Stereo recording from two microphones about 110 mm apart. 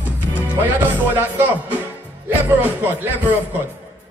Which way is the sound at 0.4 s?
15° right (ahead or behind).